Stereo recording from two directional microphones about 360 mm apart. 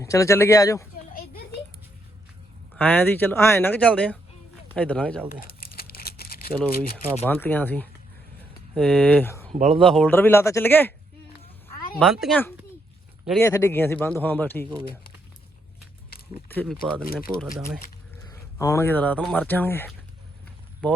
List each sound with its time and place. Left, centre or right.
0.0 s speech: centre
1.1 s a sound: left
2.7 s speech: centre
5.4 s crumpling: left
6.6 s speech: centre
9.5 s speech: centre
9.8 s speech: centre
11.9 s speech: centre
16.5 s speech: centre